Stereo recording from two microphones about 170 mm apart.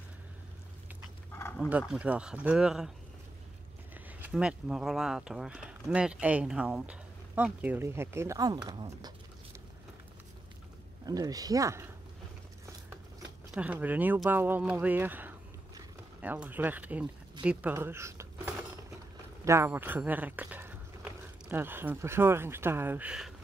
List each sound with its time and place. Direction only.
1.7 s speech: 10° right (ahead or behind)
3.9 s speech: 10° right (ahead or behind)
11.1 s speech: 20° right (ahead or behind)
13.5 s speech: 10° right (ahead or behind)